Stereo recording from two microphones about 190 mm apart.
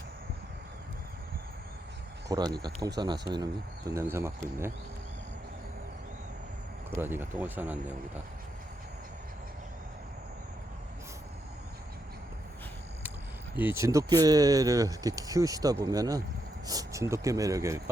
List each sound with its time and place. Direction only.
2.3 s speech: 20° right (ahead or behind)
6.9 s speech: 10° right (ahead or behind)
13.6 s speech: 10° right (ahead or behind)